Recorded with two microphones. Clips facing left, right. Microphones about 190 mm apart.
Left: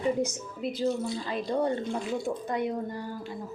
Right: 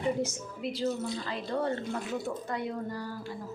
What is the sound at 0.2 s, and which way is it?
Speech, 15° left (ahead or behind).